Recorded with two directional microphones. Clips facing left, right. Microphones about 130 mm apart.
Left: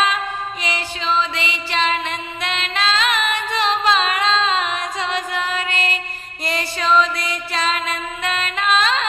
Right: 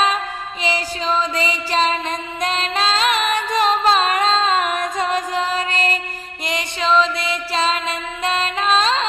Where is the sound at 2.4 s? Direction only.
40° right (ahead or behind).